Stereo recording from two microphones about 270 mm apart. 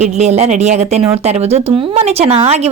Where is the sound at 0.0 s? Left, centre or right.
Right.